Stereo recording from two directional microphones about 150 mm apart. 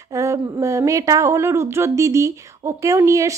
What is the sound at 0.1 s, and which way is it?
Speech, 20° right (ahead or behind).